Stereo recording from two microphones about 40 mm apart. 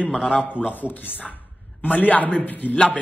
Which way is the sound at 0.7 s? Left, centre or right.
Left.